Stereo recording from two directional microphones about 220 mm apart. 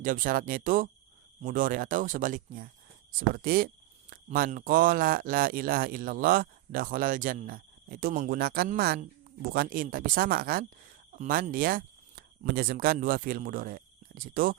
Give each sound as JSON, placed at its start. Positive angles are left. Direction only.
{"t": 0.0, "sound": "a man's voice", "side_deg": -40}